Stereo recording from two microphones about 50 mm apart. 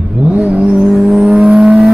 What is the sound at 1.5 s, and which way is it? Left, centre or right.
Vehicle, centre.